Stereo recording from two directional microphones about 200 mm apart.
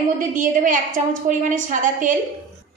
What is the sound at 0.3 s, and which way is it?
A woman's voice, 40° right (ahead or behind).